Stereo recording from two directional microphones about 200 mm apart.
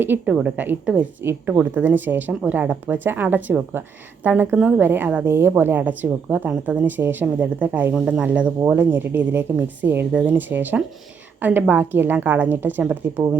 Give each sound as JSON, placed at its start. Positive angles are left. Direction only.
{"t": 0.0, "sound": "a woman's voice", "side_deg": -10}